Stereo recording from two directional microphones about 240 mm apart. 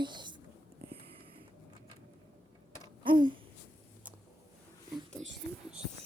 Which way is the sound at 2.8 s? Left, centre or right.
Centre.